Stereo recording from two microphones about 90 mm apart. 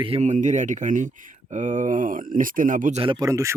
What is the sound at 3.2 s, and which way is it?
Speech, 35° right (ahead or behind).